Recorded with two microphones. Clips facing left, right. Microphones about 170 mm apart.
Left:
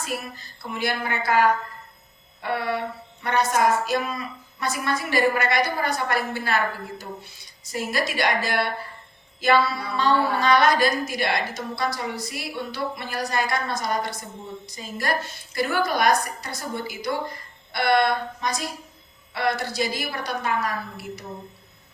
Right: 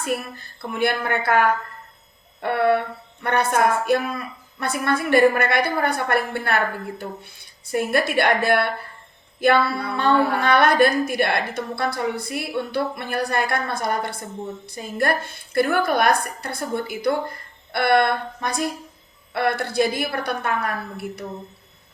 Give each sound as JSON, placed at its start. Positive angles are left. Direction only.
{"t": 0.0, "sound": "a woman's voice", "side_deg": -55}